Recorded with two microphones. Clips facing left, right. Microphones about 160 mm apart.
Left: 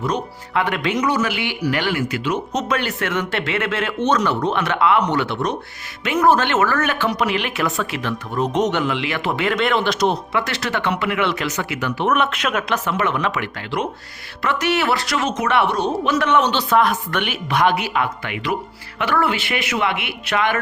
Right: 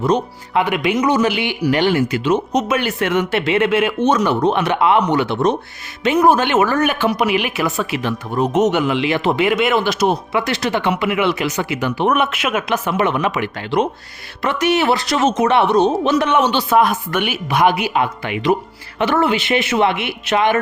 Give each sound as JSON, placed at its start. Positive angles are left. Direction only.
{"t": 0.0, "sound": "speech", "side_deg": -25}
{"t": 0.6, "sound": "speech", "side_deg": -10}
{"t": 2.6, "sound": "speech", "side_deg": -10}
{"t": 8.9, "sound": "speech", "side_deg": -20}